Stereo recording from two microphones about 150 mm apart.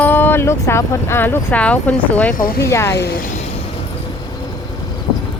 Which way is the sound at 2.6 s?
20° left (ahead or behind).